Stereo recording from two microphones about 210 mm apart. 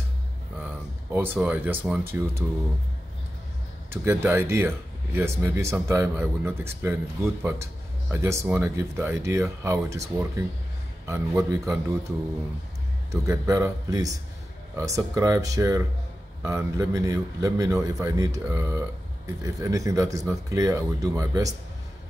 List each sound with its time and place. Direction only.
0.6 s speech: 10° right (ahead or behind)
3.9 s speech: 10° right (ahead or behind)
13.1 s speech: 15° right (ahead or behind)